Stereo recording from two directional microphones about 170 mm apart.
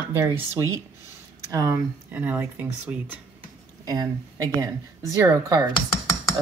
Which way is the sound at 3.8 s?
20° right (ahead or behind).